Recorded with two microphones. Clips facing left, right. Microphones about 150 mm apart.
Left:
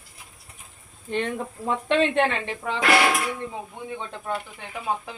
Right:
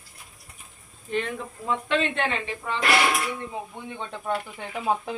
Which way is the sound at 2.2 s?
70° left (ahead or behind).